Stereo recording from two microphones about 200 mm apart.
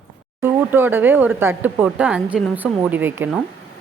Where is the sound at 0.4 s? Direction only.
10° right (ahead or behind).